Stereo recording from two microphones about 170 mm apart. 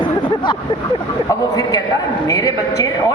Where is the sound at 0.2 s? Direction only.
25° left (ahead or behind).